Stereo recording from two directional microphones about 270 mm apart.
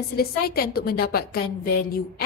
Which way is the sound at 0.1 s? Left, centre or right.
Left.